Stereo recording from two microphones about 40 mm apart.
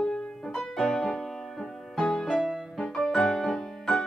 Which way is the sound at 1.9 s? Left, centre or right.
Centre.